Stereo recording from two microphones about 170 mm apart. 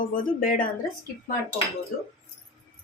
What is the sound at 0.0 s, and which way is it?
Speech, 55° left (ahead or behind).